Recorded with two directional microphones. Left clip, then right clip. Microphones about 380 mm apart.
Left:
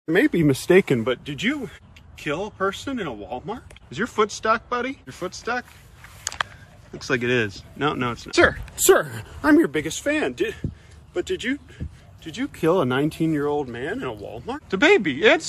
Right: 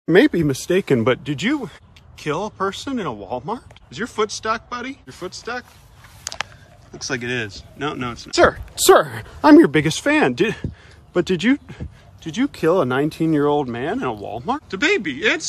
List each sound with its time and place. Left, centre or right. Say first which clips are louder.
0.3 s speech: left 2 dB; centre
1.0 s speech: right 5 dB; right
3.9 s speech: even; centre
7.0 s speech: left 2 dB; centre
9.5 s speech: right 7 dB; right
12.6 s speech: right 2 dB; centre
13.3 s speech: right 6 dB; right
14.1 s speech: right 6 dB; right
14.7 s speech: left 4 dB; centre